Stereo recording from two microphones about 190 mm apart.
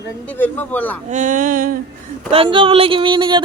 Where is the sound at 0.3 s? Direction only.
10° left (ahead or behind).